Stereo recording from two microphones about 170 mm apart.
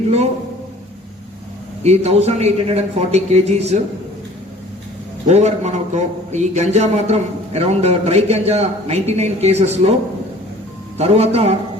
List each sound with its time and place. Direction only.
1.8 s a man's voice: 40° right (ahead or behind)
5.3 s a man's voice: 40° right (ahead or behind)
10.9 s a man's voice: 35° right (ahead or behind)